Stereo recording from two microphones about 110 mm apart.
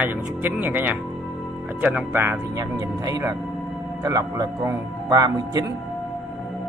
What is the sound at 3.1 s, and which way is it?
Speech, 35° right (ahead or behind).